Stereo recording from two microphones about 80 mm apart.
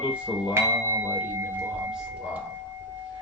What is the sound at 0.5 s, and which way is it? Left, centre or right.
Tuning fork, right.